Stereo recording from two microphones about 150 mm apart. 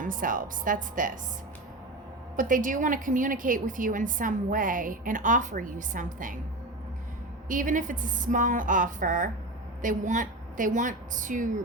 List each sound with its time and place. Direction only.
0.0 s a woman's voice: 65° right (ahead or behind)
2.3 s a woman's voice: 60° right (ahead or behind)
7.4 s a woman's voice: 60° right (ahead or behind)